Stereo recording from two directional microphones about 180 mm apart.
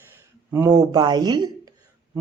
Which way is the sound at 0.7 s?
25° right (ahead or behind).